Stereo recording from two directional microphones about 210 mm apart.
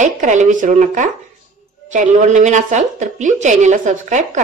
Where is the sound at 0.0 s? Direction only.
35° right (ahead or behind).